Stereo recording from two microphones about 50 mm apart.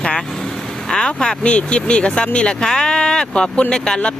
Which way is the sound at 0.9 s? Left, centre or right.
Centre.